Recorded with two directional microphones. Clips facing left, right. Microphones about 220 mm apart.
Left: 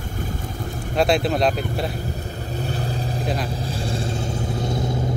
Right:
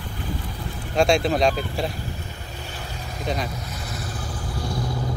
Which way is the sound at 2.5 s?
35° left (ahead or behind).